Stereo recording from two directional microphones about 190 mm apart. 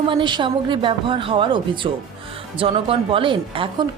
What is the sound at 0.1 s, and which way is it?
Speech, 25° right (ahead or behind).